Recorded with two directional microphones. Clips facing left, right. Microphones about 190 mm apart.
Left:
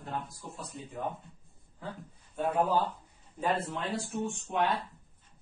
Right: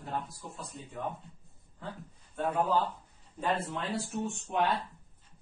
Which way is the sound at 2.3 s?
10° left (ahead or behind).